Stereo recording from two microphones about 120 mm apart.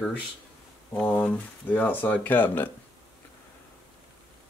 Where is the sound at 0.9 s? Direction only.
10° left (ahead or behind).